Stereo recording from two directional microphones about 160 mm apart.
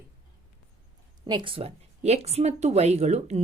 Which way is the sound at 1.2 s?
30° right (ahead or behind).